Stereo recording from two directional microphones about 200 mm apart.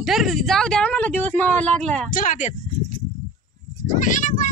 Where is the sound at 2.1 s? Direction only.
40° left (ahead or behind).